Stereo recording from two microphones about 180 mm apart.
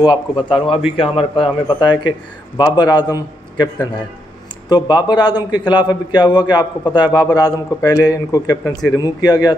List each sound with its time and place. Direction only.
0.0 s a man's voice: 25° left (ahead or behind)